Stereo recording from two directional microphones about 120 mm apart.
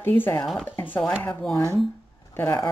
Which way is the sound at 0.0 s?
15° left (ahead or behind).